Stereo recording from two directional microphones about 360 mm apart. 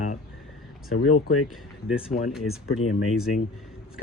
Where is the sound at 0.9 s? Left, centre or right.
Left.